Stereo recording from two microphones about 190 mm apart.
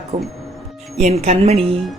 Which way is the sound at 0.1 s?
35° right (ahead or behind).